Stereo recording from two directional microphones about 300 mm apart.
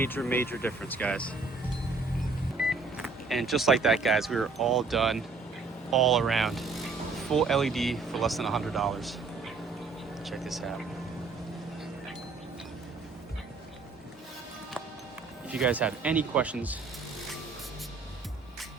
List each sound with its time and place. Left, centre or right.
0.0 s speech: centre
2.6 s speech: centre
10.2 s speech: centre
15.4 s speech: centre